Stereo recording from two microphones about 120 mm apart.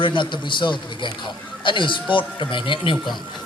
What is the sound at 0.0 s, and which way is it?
A man's voice, 40° left (ahead or behind).